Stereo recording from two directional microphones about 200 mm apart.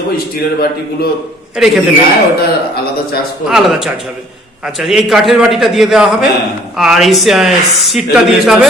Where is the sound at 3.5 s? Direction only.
5° right (ahead or behind).